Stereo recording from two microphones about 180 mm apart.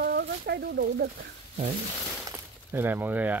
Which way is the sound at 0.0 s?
60° right (ahead or behind).